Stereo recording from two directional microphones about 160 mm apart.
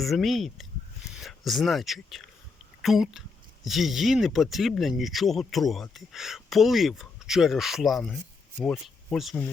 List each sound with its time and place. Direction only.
0.0 s speech: centre (ahead or behind)